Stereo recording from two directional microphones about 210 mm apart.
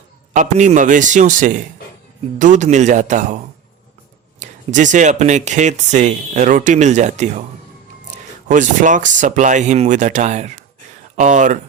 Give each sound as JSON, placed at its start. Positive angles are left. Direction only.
{"t": 0.3, "sound": "speech", "side_deg": -35}
{"t": 8.4, "sound": "speech", "side_deg": -35}